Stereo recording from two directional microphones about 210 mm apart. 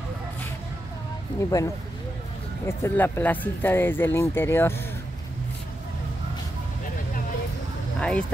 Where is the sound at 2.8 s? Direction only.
10° left (ahead or behind).